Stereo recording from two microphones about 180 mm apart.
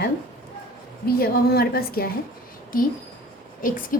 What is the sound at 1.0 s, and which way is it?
A woman's voice, 60° left (ahead or behind).